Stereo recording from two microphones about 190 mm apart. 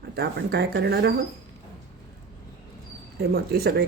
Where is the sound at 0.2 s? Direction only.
60° right (ahead or behind).